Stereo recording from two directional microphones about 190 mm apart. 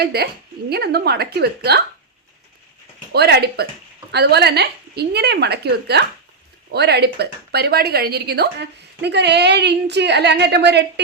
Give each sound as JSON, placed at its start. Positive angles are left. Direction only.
{"t": 0.0, "sound": "a woman's voice", "side_deg": -55}
{"t": 3.1, "sound": "a woman's voice", "side_deg": -60}